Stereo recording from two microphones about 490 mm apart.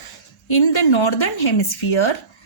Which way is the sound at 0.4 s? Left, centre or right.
Left.